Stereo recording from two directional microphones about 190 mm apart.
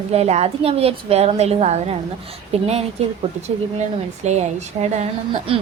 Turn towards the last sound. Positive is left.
turn(degrees=-30)  # may be behind; listen again after turning